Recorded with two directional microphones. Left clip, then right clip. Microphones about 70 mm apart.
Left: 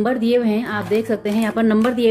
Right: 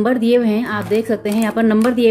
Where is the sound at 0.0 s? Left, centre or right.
Right.